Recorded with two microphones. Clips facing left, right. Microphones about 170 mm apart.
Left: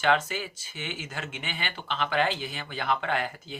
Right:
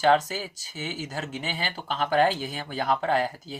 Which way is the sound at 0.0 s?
35° right (ahead or behind).